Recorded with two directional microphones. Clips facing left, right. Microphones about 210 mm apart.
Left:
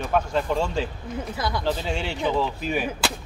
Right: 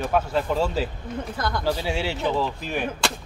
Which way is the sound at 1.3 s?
5° left (ahead or behind).